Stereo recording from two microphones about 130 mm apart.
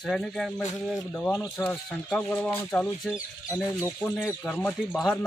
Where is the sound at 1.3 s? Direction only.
25° left (ahead or behind).